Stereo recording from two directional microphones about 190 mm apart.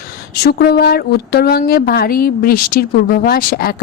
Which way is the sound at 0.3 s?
55° left (ahead or behind).